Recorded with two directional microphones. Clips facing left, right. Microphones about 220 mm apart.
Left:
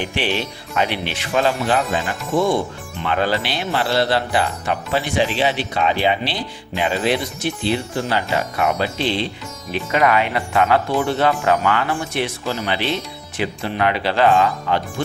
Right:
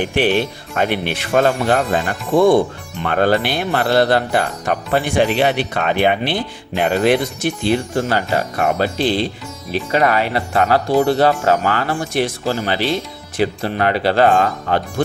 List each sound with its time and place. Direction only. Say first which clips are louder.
0.0 s speech: right 6 dB; 55° right (ahead or behind)